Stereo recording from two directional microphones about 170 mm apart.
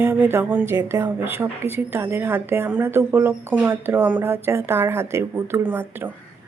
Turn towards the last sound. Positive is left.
turn(degrees=-10)  # may be behind; listen again after turning